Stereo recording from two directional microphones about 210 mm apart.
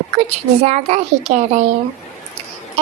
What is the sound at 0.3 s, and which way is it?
A woman's voice, 30° right (ahead or behind).